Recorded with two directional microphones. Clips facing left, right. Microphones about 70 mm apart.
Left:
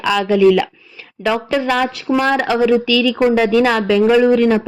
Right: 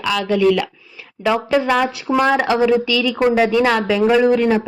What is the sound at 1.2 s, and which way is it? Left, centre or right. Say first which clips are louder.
Speech: right 1 dB; centre.